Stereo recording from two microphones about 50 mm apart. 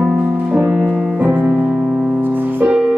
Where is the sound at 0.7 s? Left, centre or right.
Centre.